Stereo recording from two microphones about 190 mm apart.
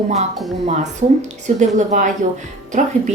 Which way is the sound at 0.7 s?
40° right (ahead or behind).